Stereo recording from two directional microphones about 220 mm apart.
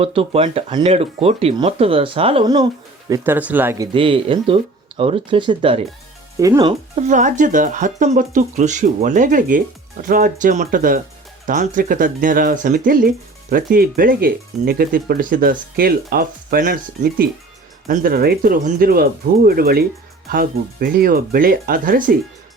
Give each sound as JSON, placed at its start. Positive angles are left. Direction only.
{"t": 0.0, "sound": "speech", "side_deg": -25}
{"t": 3.9, "sound": "speech", "side_deg": -25}
{"t": 6.9, "sound": "speech", "side_deg": -35}